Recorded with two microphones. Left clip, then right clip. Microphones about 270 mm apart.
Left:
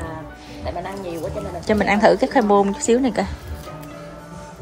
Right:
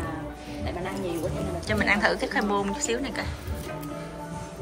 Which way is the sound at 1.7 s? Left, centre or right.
Centre.